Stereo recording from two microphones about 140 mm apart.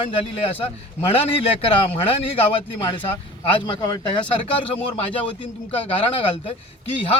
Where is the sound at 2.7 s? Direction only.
35° left (ahead or behind).